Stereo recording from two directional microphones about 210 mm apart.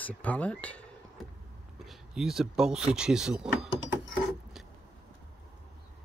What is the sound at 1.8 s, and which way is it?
Speech, centre (ahead or behind).